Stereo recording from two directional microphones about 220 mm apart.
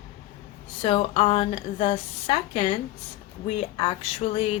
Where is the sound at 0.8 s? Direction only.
25° left (ahead or behind).